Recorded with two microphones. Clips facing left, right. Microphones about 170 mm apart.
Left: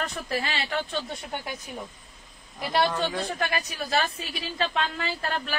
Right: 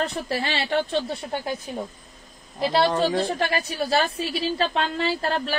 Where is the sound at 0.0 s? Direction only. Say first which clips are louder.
Right 4 dB; 35° right (ahead or behind).